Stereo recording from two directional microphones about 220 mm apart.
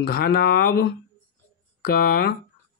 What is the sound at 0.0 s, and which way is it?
Speech, 45° left (ahead or behind).